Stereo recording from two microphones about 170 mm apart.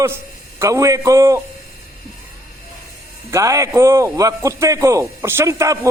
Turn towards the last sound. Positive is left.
turn(degrees=-15)  # may be behind; listen again after turning